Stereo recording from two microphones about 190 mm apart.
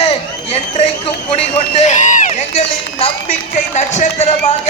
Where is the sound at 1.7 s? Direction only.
40° left (ahead or behind).